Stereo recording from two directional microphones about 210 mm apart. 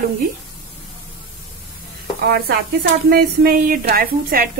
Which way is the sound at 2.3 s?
50° right (ahead or behind).